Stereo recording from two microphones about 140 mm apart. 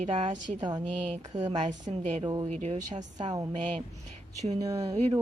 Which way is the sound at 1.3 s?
30° right (ahead or behind).